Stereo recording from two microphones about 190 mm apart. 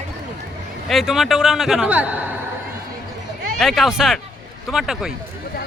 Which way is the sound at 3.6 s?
Centre (ahead or behind).